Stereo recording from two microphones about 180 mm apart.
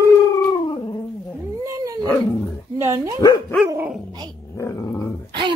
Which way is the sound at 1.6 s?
20° right (ahead or behind).